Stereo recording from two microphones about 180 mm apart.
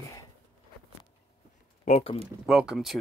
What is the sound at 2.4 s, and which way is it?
Speech, 5° right (ahead or behind).